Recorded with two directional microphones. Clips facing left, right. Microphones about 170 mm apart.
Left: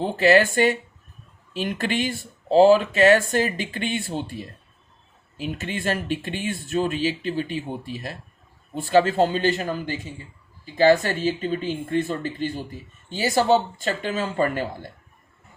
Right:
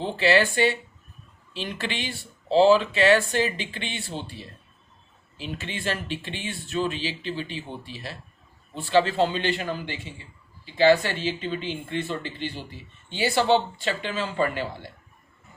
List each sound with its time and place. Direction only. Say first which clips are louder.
0.0 s speech: left 4 dB; 45° left (ahead or behind)